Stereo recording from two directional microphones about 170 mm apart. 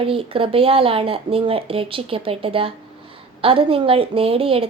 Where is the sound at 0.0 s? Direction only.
30° right (ahead or behind).